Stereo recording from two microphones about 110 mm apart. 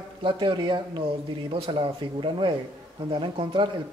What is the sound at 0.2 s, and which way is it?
Speech, 45° right (ahead or behind).